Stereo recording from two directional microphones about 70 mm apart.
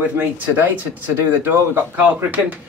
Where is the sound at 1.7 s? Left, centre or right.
Right.